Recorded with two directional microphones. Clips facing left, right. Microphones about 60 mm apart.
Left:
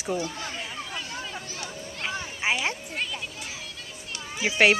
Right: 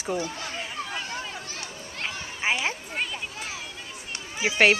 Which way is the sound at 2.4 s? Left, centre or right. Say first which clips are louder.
Even; centre.